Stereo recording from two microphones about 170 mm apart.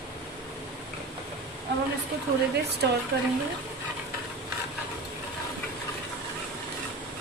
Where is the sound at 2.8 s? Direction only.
75° right (ahead or behind).